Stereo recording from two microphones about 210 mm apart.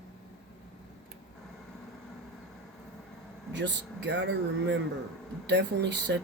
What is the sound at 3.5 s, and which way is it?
Speech, 55° right (ahead or behind).